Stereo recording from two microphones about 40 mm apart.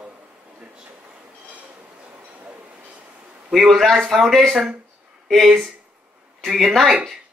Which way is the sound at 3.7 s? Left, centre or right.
Centre.